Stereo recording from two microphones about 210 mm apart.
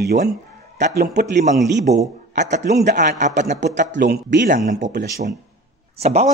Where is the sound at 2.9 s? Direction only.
40° right (ahead or behind).